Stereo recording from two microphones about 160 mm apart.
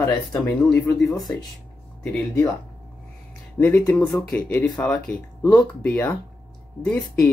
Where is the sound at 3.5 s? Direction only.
10° left (ahead or behind).